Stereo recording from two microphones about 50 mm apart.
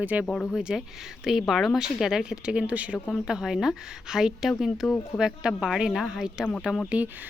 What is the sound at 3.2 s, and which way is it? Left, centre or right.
A woman's voice, centre.